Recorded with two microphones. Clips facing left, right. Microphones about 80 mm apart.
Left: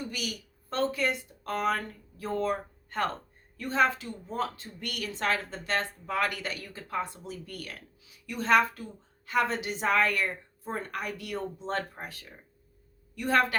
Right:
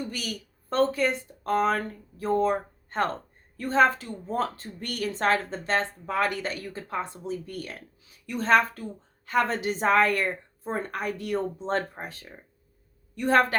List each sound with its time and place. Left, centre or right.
0.1 s speech: right
3.6 s a woman's voice: right